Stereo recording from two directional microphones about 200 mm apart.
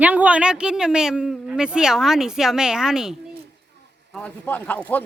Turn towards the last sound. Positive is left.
turn(degrees=10)  # may be behind; listen again after turning